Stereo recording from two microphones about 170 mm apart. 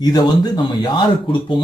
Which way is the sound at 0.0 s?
25° left (ahead or behind).